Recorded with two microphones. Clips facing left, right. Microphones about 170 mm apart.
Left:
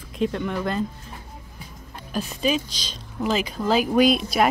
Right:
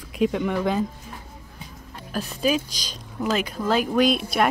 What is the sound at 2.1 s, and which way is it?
Speech, 5° right (ahead or behind).